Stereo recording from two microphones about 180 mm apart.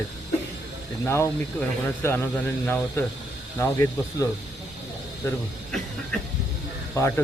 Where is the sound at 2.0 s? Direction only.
10° left (ahead or behind).